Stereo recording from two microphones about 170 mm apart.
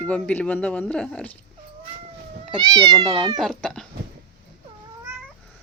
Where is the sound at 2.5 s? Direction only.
25° right (ahead or behind).